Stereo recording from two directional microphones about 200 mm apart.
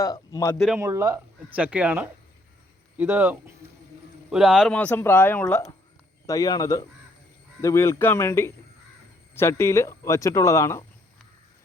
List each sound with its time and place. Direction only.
0.0 s speech: 15° left (ahead or behind)
0.8 s speech: 15° right (ahead or behind); by 10.8 s 15° left (ahead or behind)